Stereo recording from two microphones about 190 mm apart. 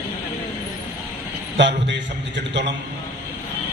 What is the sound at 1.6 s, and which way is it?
Speech, 70° right (ahead or behind).